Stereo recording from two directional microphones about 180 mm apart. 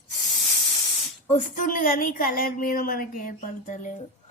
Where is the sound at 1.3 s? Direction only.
40° left (ahead or behind).